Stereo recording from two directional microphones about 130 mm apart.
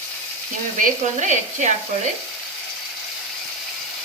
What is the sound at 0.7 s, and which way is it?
Frying, 70° right (ahead or behind).